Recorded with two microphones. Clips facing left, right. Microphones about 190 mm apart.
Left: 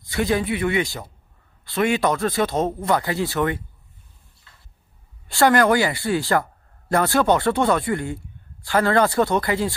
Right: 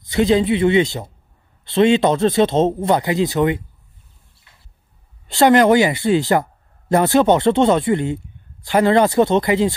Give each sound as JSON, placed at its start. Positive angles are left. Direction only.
{"t": 0.0, "sound": "speech", "side_deg": -20}
{"t": 4.5, "sound": "a sound", "side_deg": -20}
{"t": 5.3, "sound": "speech", "side_deg": -20}